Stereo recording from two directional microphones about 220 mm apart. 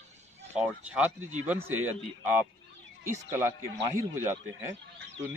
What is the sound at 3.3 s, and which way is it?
A man's voice, 15° right (ahead or behind).